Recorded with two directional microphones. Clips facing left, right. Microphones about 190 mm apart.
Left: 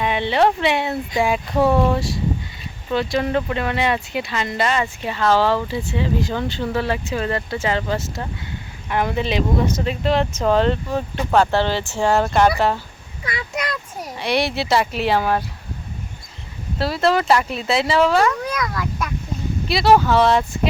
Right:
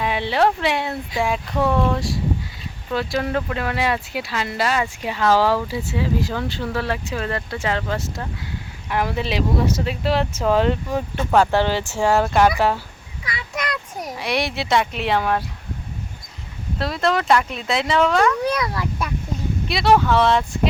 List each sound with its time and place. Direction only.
0.0 s speech: centre (ahead or behind)
14.0 s speech: centre (ahead or behind)
16.7 s speech: centre (ahead or behind)
18.4 s speech: 30° right (ahead or behind)
19.6 s speech: centre (ahead or behind)